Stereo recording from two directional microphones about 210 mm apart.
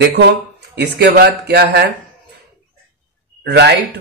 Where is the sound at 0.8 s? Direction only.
50° right (ahead or behind).